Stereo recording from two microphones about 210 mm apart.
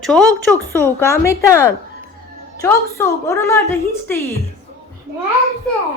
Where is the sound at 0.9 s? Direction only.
10° left (ahead or behind).